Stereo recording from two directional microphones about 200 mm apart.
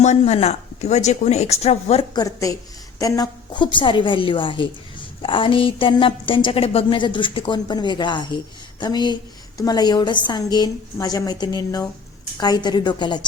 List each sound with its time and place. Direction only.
0.0 s a woman's voice: 35° left (ahead or behind)